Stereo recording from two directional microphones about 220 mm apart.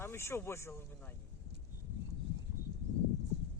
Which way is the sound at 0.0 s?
10° left (ahead or behind).